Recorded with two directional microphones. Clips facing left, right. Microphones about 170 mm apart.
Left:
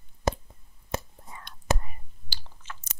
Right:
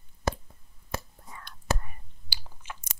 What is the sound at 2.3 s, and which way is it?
Biting, 10° right (ahead or behind).